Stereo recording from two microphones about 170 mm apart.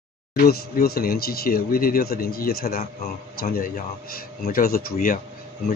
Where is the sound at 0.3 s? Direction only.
65° left (ahead or behind).